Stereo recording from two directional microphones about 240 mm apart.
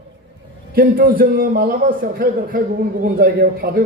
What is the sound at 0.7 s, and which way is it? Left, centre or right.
A man's voice, right.